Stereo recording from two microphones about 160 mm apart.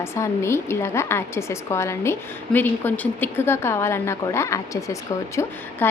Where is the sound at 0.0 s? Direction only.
15° left (ahead or behind).